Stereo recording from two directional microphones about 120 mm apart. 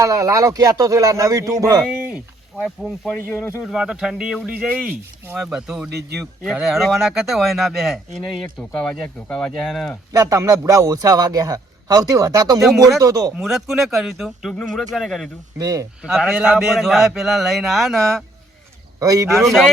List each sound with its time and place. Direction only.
0.0 s speech: 25° right (ahead or behind)
2.6 s speech: 5° right (ahead or behind)
3.1 s speech: 15° left (ahead or behind)
3.6 s speech: 5° right (ahead or behind)
10.1 s a man's voice: 25° right (ahead or behind)
13.3 s speech: 5° right (ahead or behind)
15.5 s speech: 30° right (ahead or behind)
16.0 s speech: 5° right (ahead or behind)
18.9 s speech: 30° right (ahead or behind)
19.5 s speech: centre (ahead or behind)